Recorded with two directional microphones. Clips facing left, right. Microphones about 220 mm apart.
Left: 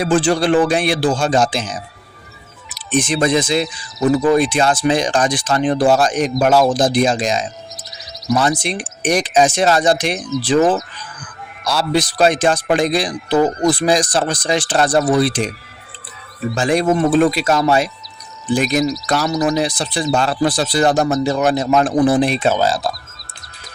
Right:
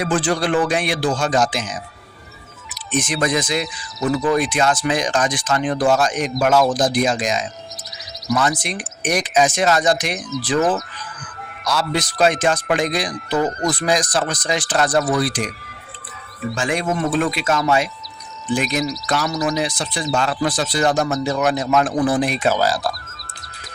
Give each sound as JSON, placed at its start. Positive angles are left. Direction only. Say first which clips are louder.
{"t": 0.0, "sound": "speech", "louder": "left 5 dB", "side_deg": 30}
{"t": 10.2, "sound": "speech", "louder": "left 5 dB", "side_deg": 0}
{"t": 11.6, "sound": "speech", "louder": "left 4 dB", "side_deg": 30}
{"t": 16.6, "sound": "speech", "louder": "left 7 dB", "side_deg": 35}
{"t": 21.7, "sound": "speech", "louder": "left 5 dB", "side_deg": 25}